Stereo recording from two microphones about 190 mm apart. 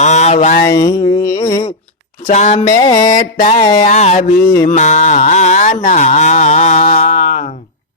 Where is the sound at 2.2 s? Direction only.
40° left (ahead or behind).